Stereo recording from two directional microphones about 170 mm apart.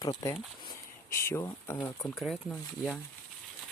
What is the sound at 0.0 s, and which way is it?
Speech, 20° left (ahead or behind).